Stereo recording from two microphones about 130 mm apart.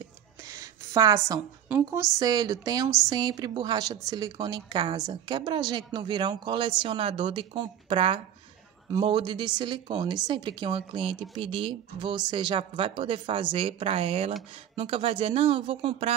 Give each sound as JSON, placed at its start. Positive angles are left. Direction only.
{"t": 0.5, "sound": "a sound", "side_deg": -25}
{"t": 1.7, "sound": "speech", "side_deg": -20}
{"t": 2.2, "sound": "a woman's voice", "side_deg": -30}